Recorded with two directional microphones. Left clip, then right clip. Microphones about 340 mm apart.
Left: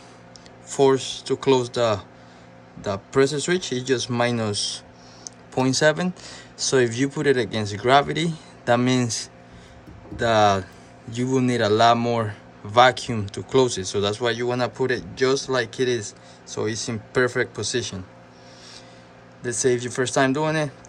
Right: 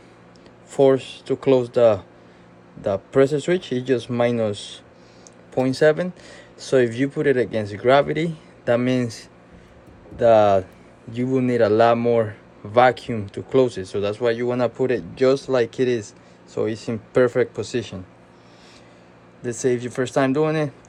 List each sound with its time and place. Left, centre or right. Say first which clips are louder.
0.7 s a man's voice: right 2 dB; centre
19.4 s a man's voice: even; centre